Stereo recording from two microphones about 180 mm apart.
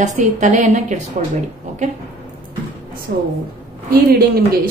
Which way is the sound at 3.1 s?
60° right (ahead or behind).